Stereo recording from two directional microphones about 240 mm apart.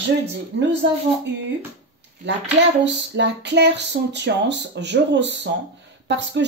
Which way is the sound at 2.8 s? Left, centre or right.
Right.